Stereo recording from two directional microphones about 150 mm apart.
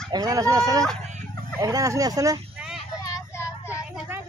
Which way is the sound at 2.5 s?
5° right (ahead or behind).